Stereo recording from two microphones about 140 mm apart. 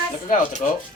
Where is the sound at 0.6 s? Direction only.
55° left (ahead or behind).